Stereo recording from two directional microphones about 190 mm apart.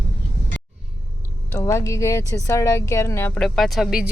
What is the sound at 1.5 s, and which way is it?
A woman's voice, 15° left (ahead or behind).